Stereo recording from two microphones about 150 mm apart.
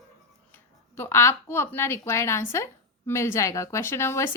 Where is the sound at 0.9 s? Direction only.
15° left (ahead or behind).